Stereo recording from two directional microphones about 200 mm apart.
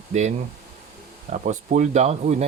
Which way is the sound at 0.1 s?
35° right (ahead or behind).